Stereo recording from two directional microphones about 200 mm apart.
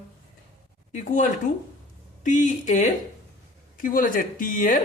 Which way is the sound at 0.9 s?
40° left (ahead or behind).